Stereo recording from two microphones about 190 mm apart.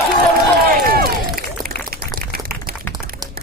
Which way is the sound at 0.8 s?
50° right (ahead or behind).